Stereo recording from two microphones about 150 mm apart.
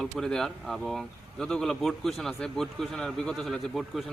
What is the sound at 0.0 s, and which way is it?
Speech, 5° left (ahead or behind).